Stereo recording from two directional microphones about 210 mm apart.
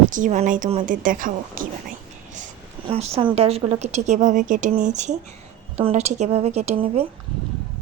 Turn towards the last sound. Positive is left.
turn(degrees=-30)  # may be behind; listen again after turning